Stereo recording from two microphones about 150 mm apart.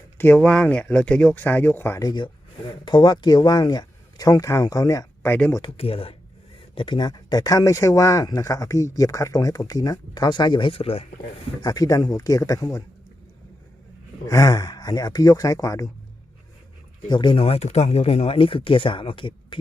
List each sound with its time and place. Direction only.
0.2 s speech: 10° left (ahead or behind)
2.0 s speech: 30° left (ahead or behind); by 5.6 s 15° left (ahead or behind)
5.6 s speech: 40° left (ahead or behind)
11.6 s speech: 25° left (ahead or behind)
14.3 s speech: 20° left (ahead or behind)
17.1 s speech: 30° left (ahead or behind)